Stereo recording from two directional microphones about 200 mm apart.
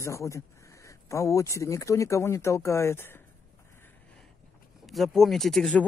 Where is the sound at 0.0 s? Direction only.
15° left (ahead or behind).